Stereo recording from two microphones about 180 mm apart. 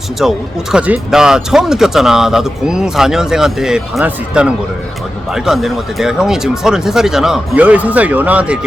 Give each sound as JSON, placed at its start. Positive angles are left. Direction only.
{"t": 0.2, "sound": "speech", "side_deg": -5}